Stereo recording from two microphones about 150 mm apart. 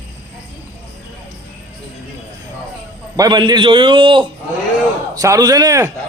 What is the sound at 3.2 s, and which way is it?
A man's voice, 30° right (ahead or behind).